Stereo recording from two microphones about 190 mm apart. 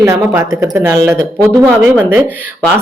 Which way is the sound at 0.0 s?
15° right (ahead or behind).